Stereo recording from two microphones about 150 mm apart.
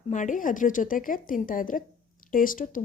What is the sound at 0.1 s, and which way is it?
A woman's voice, 55° left (ahead or behind).